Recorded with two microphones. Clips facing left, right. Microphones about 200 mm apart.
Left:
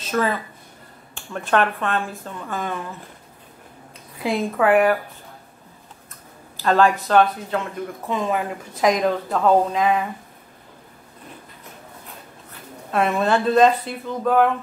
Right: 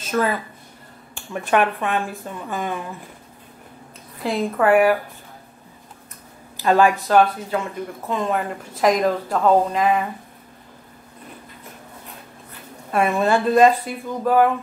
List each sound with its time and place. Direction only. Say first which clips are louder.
0.1 s speech: right 1 dB; centre (ahead or behind)
1.1 s speech: right 1 dB; 10° right (ahead or behind)
4.2 s speech: even; centre (ahead or behind)
6.6 s speech: right 1 dB; 10° right (ahead or behind)
12.9 s speech: right 1 dB; 5° right (ahead or behind)